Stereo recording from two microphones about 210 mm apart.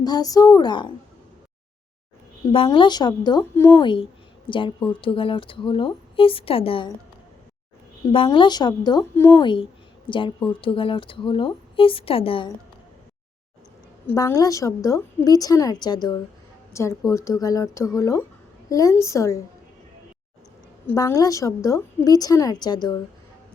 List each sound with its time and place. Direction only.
0.0 s speech: 20° left (ahead or behind)
2.5 s speech: 25° left (ahead or behind)
8.1 s speech: 25° left (ahead or behind)
14.1 s a woman's voice: 15° left (ahead or behind)
20.8 s a woman's voice: 15° left (ahead or behind)